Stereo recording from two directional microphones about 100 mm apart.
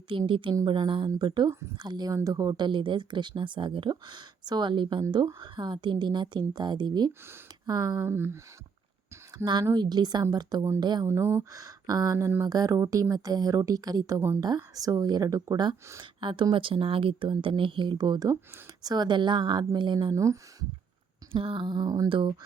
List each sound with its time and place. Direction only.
0.1 s a woman's voice: 60° right (ahead or behind); by 8.0 s 40° right (ahead or behind)
8.0 s speech: 25° right (ahead or behind)
9.4 s speech: 45° right (ahead or behind)
11.0 s a woman's voice: 25° right (ahead or behind); by 15.7 s 45° right (ahead or behind)
16.2 s speech: 55° right (ahead or behind)
20.1 s a woman's voice: 30° right (ahead or behind)
21.3 s speech: 60° right (ahead or behind); by 22.1 s 35° right (ahead or behind)
22.1 s speech: 55° right (ahead or behind)